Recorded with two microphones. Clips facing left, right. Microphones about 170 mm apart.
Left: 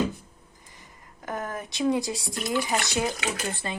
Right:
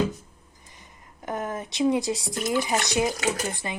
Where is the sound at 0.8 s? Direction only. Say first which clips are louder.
Right 2 dB; 20° right (ahead or behind).